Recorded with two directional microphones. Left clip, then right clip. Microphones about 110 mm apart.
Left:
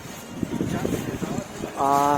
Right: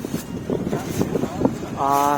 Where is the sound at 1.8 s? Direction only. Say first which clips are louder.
Right 2 dB; 10° right (ahead or behind).